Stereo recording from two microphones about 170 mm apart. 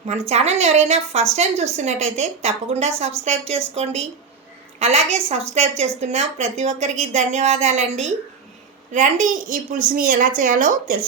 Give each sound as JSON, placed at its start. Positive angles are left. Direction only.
{"t": 0.1, "sound": "a woman's voice", "side_deg": -40}
{"t": 4.8, "sound": "a woman's voice", "side_deg": -40}